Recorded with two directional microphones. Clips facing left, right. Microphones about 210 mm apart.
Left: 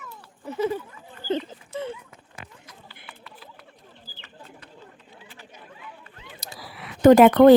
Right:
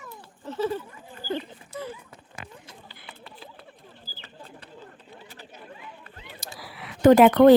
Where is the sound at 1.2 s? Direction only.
25° left (ahead or behind).